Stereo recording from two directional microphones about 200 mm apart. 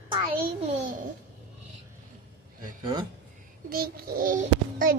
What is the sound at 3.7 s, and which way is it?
A child's voice, 50° right (ahead or behind).